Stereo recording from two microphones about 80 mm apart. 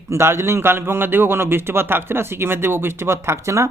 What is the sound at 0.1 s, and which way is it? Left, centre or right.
A man's voice, right.